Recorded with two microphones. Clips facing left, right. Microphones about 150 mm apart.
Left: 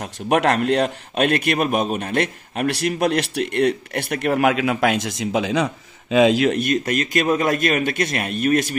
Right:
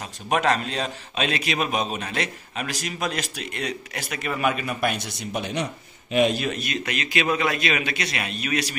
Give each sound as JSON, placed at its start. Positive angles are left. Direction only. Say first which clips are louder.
{"t": 0.0, "sound": "a man's voice", "louder": "left 5 dB", "side_deg": 65}
{"t": 6.6, "sound": "a man's voice", "louder": "left 8 dB", "side_deg": 45}